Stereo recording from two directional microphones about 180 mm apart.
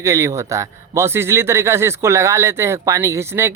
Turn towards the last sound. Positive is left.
turn(degrees=-15)  # may be behind; listen again after turning